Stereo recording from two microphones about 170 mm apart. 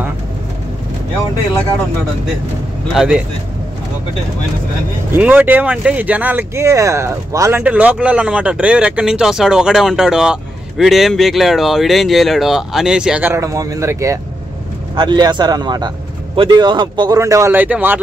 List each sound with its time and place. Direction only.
2.9 s speech: 5° right (ahead or behind)
5.1 s speech: 10° right (ahead or behind)